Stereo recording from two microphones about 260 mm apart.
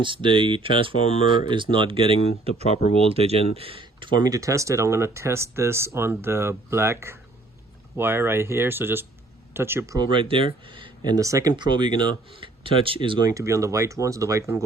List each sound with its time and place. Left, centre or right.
0.0 s speech: centre